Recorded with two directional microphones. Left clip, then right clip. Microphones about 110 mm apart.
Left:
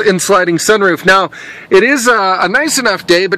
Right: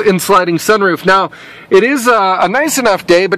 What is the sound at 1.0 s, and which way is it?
Speech, 10° left (ahead or behind).